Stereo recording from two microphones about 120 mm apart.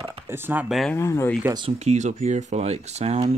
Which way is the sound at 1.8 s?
70° right (ahead or behind).